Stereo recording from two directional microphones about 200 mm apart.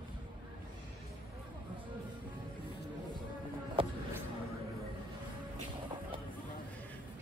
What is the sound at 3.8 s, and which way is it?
Music, 25° right (ahead or behind).